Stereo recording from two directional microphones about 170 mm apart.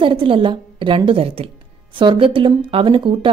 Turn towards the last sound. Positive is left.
turn(degrees=-30)  # may be behind; listen again after turning